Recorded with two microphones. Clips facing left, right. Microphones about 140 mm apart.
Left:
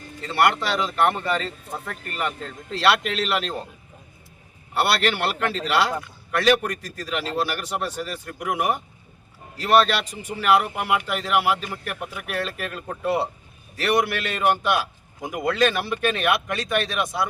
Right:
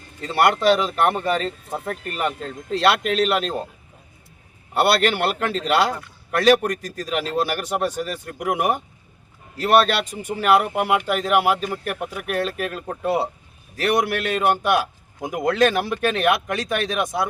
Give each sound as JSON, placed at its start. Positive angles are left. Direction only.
{"t": 0.2, "sound": "a man's voice", "side_deg": -40}
{"t": 4.8, "sound": "a man's voice", "side_deg": -45}